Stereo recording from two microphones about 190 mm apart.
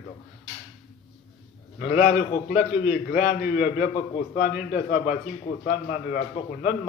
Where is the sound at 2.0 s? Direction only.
45° left (ahead or behind).